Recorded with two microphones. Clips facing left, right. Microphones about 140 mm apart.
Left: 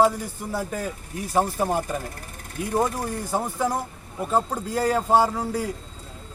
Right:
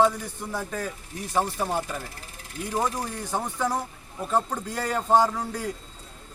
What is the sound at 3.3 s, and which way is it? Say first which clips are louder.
A man's voice: left 2 dB; 10° left (ahead or behind).